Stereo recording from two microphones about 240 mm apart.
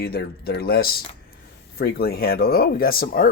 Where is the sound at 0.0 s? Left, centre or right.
Left.